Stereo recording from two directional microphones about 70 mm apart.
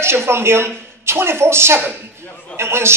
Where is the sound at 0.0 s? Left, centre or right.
Right.